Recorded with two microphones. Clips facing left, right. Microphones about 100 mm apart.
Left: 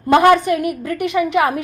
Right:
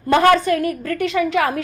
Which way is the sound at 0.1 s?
15° left (ahead or behind).